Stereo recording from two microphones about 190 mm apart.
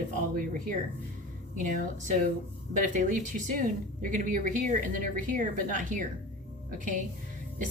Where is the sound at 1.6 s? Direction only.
45° right (ahead or behind).